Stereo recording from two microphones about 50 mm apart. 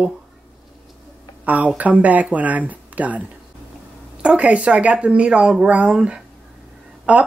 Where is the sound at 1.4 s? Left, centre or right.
Right.